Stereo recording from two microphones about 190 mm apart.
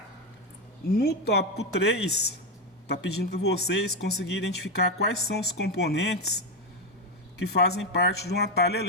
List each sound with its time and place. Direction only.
0.9 s speech: 60° left (ahead or behind)
7.3 s speech: 60° left (ahead or behind)